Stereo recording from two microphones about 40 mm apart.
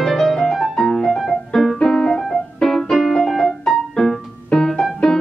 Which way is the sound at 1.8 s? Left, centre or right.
Centre.